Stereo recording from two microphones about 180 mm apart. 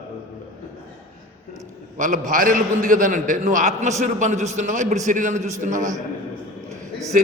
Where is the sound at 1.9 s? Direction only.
45° right (ahead or behind).